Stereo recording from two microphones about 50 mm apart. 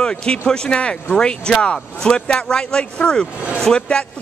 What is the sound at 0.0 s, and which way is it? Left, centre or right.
Speech, centre.